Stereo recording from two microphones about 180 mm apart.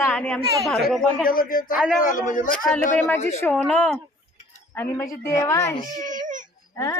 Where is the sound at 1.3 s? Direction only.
50° left (ahead or behind).